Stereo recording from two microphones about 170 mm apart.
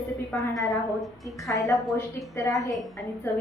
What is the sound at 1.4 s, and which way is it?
A woman's voice, 20° left (ahead or behind).